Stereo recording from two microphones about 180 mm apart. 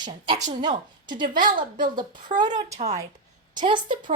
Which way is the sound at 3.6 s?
25° right (ahead or behind).